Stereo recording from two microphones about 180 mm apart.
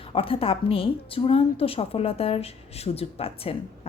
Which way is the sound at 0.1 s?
30° left (ahead or behind).